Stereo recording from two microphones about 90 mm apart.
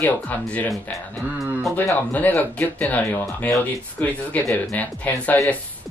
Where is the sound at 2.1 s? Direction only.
15° left (ahead or behind).